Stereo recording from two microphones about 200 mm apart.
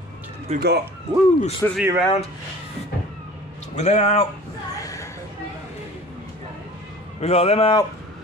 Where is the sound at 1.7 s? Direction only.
5° right (ahead or behind).